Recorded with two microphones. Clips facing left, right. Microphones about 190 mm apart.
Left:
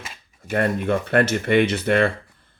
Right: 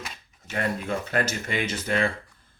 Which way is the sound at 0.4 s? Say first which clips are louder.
Left 7 dB; 55° left (ahead or behind).